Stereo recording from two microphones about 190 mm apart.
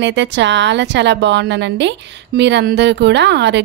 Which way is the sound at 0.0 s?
70° right (ahead or behind).